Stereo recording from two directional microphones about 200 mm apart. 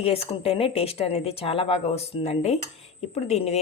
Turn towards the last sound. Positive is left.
turn(degrees=30)  # may be behind; listen again after turning